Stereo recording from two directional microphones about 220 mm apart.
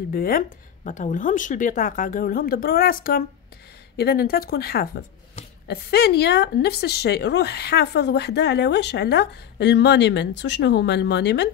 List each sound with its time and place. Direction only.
0.1 s a woman's voice: 40° left (ahead or behind)